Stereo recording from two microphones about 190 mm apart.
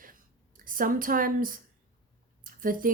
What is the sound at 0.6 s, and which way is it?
Speech, 45° right (ahead or behind).